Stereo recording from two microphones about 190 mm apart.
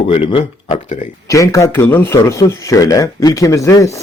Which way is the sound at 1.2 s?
15° left (ahead or behind).